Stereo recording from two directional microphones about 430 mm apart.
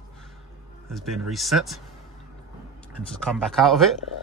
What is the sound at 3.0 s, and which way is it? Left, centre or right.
Speech, centre.